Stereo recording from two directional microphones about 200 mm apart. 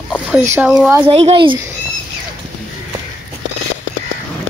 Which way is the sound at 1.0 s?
25° right (ahead or behind).